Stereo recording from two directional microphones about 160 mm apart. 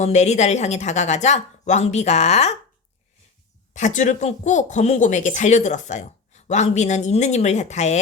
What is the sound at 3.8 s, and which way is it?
Speech, 50° left (ahead or behind).